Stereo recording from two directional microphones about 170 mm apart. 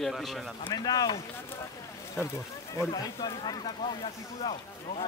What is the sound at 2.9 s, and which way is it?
Speech, 25° left (ahead or behind).